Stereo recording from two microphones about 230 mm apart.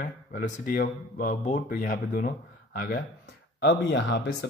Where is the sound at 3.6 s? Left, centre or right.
Left.